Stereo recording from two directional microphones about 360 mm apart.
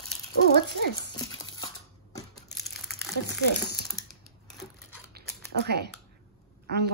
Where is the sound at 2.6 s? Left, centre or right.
Centre.